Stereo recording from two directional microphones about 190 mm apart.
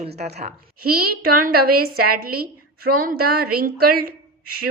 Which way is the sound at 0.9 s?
50° right (ahead or behind).